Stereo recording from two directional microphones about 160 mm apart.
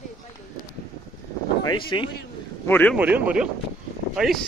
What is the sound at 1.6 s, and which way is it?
Speech, 30° left (ahead or behind).